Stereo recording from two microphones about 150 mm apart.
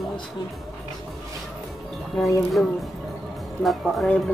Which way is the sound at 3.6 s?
Centre (ahead or behind).